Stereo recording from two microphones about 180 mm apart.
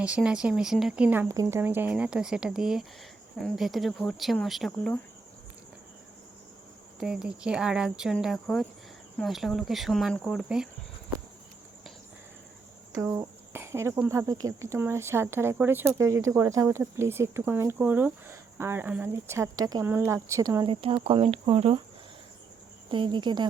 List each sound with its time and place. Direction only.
0.0 s speech: 5° right (ahead or behind)
7.0 s speech: 5° right (ahead or behind)
13.0 s speech: 15° right (ahead or behind)
20.7 s speech: 30° right (ahead or behind)
22.9 s speech: 25° right (ahead or behind)